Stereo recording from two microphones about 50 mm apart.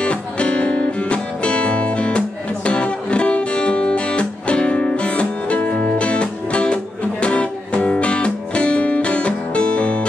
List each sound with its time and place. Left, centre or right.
0.0 s music: left